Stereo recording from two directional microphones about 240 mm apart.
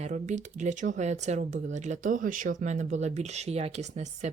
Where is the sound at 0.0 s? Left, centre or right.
Right.